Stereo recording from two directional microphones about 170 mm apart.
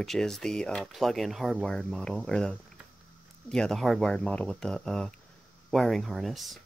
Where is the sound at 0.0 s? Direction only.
Centre (ahead or behind).